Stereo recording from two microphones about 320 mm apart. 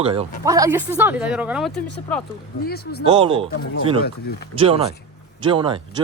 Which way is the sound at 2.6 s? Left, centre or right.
Left.